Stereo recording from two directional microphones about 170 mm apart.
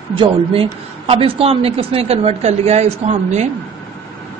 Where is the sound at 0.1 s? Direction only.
30° right (ahead or behind).